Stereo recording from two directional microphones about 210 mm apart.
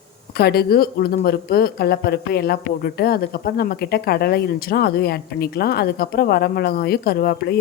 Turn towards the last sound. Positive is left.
turn(degrees=45)  # may be behind; listen again after turning